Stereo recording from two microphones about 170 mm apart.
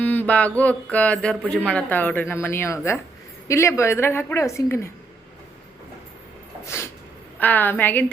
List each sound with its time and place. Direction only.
0.0 s speech: 10° left (ahead or behind)
7.3 s speech: 10° left (ahead or behind)